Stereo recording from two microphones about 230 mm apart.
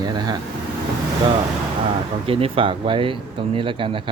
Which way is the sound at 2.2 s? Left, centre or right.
Right.